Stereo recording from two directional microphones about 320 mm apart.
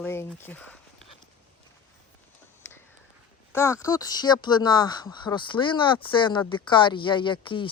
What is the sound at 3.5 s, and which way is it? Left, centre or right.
Speech, centre.